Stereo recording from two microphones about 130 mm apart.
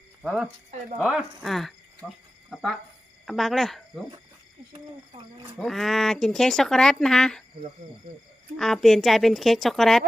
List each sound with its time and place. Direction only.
0.2 s speech: 5° right (ahead or behind)
1.4 s speech: centre (ahead or behind)
4.7 s a sound: 40° right (ahead or behind)
5.5 s speech: centre (ahead or behind)
8.5 s speech: 5° left (ahead or behind)